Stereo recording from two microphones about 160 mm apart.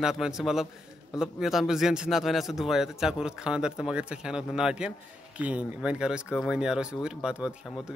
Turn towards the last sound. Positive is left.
turn(degrees=-5)  # may be behind; listen again after turning